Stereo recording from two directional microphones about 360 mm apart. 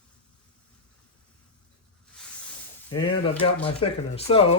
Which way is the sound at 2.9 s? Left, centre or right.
Centre.